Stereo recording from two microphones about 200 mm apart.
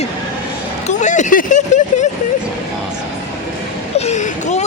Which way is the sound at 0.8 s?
35° left (ahead or behind).